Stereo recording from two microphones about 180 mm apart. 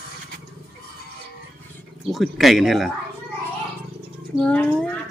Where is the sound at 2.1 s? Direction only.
Centre (ahead or behind).